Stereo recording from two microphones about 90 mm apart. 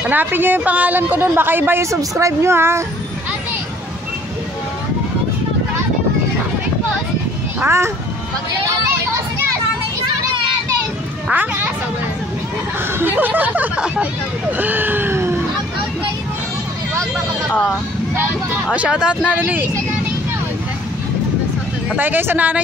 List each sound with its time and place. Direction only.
0.0 s a woman's voice: 20° right (ahead or behind)
1.9 s speech: 35° right (ahead or behind)
7.6 s speech: 30° right (ahead or behind)
11.3 s a woman's voice: 20° right (ahead or behind)
13.0 s speech: 20° right (ahead or behind)
14.6 s a sound: 20° right (ahead or behind)
18.7 s speech: 15° right (ahead or behind)
21.9 s a woman's voice: 20° right (ahead or behind)